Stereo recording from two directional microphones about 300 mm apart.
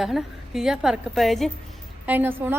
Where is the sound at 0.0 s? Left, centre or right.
Centre.